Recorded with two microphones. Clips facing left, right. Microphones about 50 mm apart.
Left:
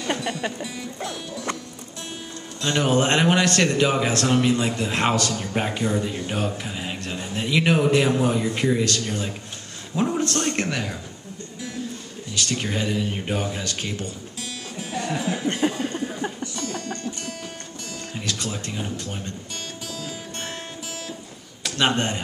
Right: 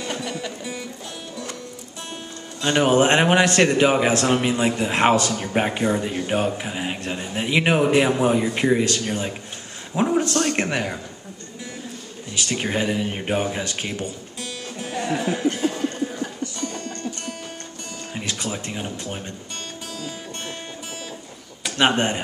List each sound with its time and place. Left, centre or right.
2.6 s a man's voice: centre
12.4 s a man's voice: centre
15.0 s music: centre
15.6 s a sound: left
16.5 s music: centre
18.1 s speech: centre
20.0 s music: centre
21.6 s speech: centre